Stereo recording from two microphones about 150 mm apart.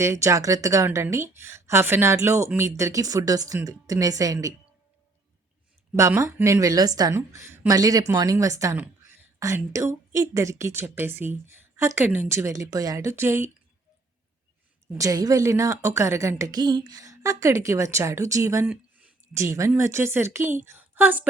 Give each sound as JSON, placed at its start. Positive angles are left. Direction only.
{"t": 0.0, "sound": "a woman's voice", "side_deg": -20}
{"t": 6.0, "sound": "a woman's voice", "side_deg": -20}
{"t": 14.9, "sound": "a woman's voice", "side_deg": -25}
{"t": 18.7, "sound": "a woman's voice", "side_deg": -10}